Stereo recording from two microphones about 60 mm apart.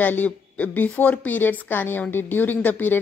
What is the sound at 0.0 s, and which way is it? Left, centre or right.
A woman's voice, left.